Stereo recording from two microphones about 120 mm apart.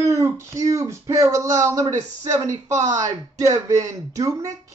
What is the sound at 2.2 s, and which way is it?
Speech, 25° right (ahead or behind).